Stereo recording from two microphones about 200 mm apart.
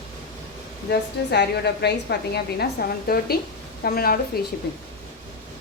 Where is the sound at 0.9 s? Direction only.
55° left (ahead or behind).